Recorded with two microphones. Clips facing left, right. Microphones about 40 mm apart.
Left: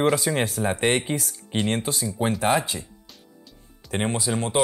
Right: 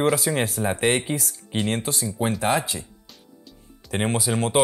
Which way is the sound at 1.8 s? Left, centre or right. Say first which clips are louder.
Even; centre.